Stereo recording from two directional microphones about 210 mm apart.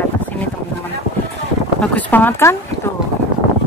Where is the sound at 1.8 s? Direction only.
5° left (ahead or behind).